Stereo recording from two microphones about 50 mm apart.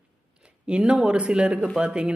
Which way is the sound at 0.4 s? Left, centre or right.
Centre.